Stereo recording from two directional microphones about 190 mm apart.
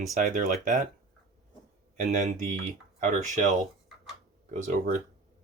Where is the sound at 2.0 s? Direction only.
40° right (ahead or behind).